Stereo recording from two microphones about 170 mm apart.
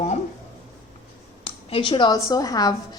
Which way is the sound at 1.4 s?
30° left (ahead or behind).